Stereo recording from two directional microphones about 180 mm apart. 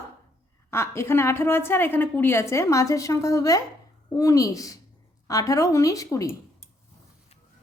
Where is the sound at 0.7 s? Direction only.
15° left (ahead or behind).